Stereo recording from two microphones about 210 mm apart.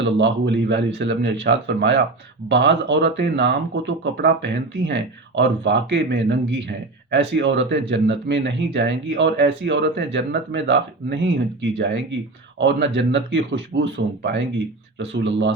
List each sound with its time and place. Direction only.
0.0 s speech: 60° right (ahead or behind)